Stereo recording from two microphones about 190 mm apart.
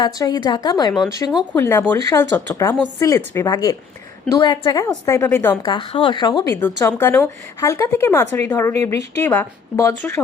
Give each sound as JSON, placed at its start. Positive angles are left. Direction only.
{"t": 0.0, "sound": "a woman's voice", "side_deg": 20}
{"t": 5.7, "sound": "speech", "side_deg": 25}